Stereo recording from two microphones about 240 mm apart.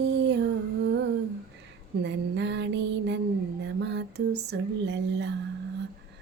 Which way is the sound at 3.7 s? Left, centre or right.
Right.